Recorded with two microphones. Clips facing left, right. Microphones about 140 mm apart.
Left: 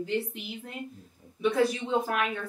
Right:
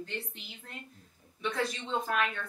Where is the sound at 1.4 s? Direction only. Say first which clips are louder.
Left 8 dB; 10° left (ahead or behind).